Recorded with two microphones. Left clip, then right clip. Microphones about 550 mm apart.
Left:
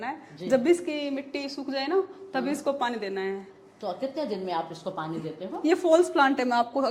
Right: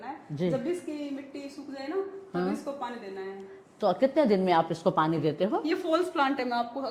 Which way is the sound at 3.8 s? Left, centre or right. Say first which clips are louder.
Right 7 dB; right.